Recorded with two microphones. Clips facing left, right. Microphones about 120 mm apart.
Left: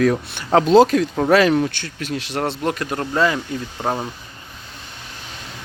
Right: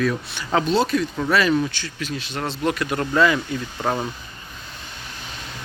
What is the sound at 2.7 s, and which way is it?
Speech, 40° left (ahead or behind).